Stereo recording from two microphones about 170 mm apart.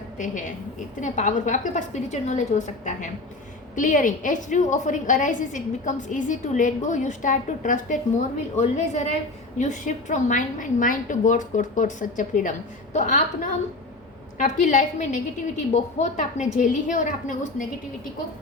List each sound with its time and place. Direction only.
0.2 s a woman's voice: 50° left (ahead or behind)